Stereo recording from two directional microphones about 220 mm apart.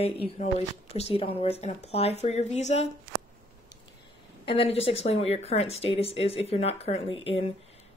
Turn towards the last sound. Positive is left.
turn(degrees=25)  # may be behind; listen again after turning